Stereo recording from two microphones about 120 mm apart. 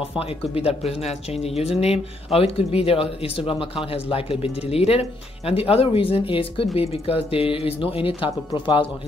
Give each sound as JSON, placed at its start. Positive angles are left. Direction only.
{"t": 0.1, "sound": "speech", "side_deg": 55}